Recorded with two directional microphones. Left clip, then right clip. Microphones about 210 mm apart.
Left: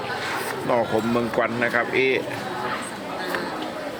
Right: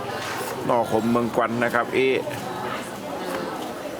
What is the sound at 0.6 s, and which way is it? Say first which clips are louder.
A man's voice: right 1 dB; 10° right (ahead or behind).